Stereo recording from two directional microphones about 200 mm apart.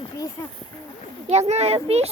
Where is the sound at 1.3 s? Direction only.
35° right (ahead or behind).